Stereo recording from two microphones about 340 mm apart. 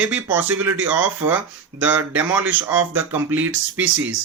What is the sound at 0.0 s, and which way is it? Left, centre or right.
Speech, centre.